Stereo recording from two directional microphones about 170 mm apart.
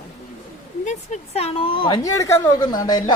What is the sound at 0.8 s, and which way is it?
A woman's voice, 45° left (ahead or behind).